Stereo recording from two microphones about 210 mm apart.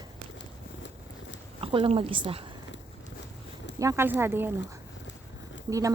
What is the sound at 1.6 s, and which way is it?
Speech, 25° right (ahead or behind).